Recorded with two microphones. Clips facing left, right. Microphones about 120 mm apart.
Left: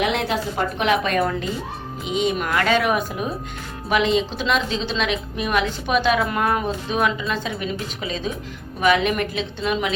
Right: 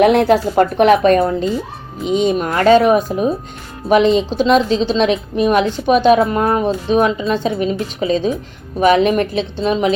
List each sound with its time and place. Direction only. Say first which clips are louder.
0.0 s speech: right 11 dB; 50° right (ahead or behind)
1.0 s a woman's voice: right 9 dB; 40° right (ahead or behind)